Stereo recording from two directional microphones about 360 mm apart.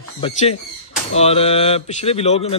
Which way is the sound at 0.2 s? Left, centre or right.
Centre.